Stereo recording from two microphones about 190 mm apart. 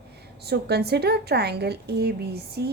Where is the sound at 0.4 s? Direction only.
60° right (ahead or behind).